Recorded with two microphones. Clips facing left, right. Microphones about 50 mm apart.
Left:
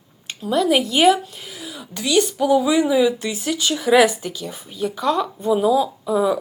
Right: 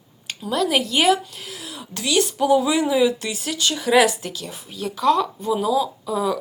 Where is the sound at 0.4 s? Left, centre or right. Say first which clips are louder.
Left 3 dB; centre.